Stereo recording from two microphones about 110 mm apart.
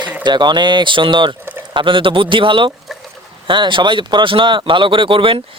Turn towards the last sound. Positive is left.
turn(degrees=-50)  # may be behind; listen again after turning